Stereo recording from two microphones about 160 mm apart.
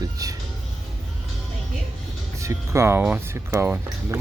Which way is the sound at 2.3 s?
20° right (ahead or behind).